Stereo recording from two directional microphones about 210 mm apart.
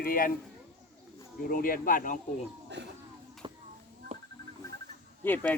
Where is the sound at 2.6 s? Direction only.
55° right (ahead or behind).